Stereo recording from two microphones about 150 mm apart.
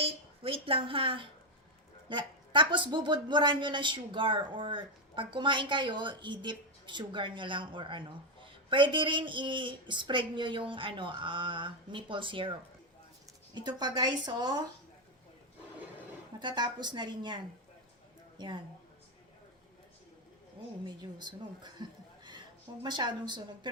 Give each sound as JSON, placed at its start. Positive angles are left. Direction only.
{"t": 0.0, "sound": "a woman's voice", "side_deg": -40}
{"t": 16.4, "sound": "a woman's voice", "side_deg": -30}
{"t": 20.8, "sound": "a woman's voice", "side_deg": -30}